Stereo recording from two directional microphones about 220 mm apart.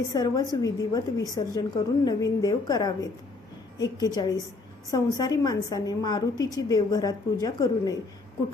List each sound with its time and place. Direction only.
0.1 s a woman's voice: 15° left (ahead or behind)